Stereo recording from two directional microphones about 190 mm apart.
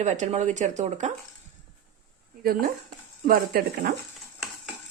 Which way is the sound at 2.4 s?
50° right (ahead or behind).